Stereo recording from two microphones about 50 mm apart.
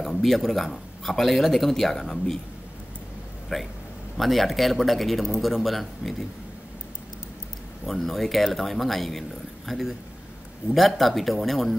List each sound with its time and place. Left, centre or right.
0.0 s speech: centre
3.5 s speech: centre
7.8 s speech: centre